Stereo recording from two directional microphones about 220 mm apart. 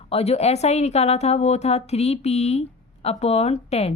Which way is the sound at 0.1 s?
30° left (ahead or behind).